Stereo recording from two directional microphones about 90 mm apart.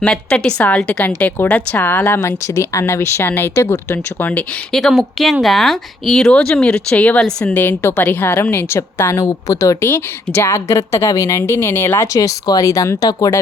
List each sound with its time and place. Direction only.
0.0 s a woman's voice: 10° left (ahead or behind)
4.7 s a woman's voice: 5° left (ahead or behind)
7.5 s a woman's voice: 20° left (ahead or behind)
12.1 s speech: 40° left (ahead or behind)